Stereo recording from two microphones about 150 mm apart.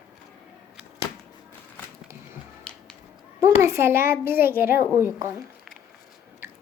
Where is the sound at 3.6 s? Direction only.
15° right (ahead or behind).